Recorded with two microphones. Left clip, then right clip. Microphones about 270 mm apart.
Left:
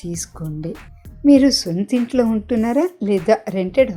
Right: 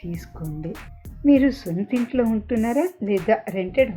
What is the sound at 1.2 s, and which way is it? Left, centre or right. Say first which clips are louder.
Speech: left 5 dB; left.